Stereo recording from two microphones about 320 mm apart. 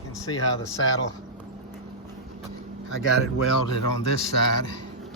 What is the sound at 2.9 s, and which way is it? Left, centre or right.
Speech, left.